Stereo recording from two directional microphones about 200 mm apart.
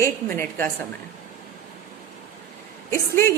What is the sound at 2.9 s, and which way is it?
Speech, 15° left (ahead or behind).